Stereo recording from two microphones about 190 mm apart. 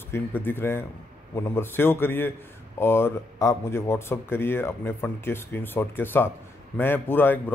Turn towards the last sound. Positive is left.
turn(degrees=10)  # may be behind; listen again after turning